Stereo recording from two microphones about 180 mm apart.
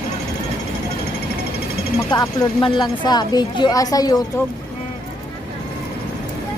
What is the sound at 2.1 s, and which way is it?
Speech, 20° left (ahead or behind).